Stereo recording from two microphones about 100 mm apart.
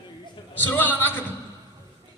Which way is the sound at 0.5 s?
20° left (ahead or behind).